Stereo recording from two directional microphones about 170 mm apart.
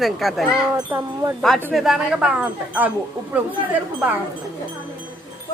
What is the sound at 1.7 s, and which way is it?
A woman's voice, centre (ahead or behind).